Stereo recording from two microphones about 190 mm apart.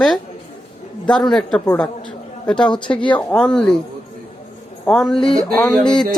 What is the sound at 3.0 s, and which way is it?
Speech, 25° left (ahead or behind).